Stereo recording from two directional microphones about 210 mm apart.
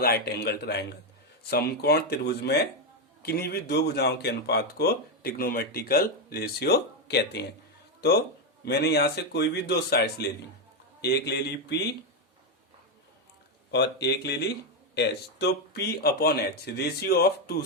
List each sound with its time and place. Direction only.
0.0 s speech: 50° left (ahead or behind)
8.6 s speech: 50° left (ahead or behind)
13.7 s speech: 55° left (ahead or behind)